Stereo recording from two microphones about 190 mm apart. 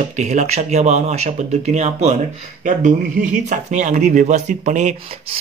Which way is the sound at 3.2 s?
40° right (ahead or behind).